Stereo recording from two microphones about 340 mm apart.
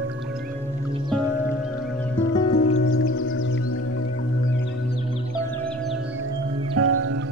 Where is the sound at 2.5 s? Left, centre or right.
Left.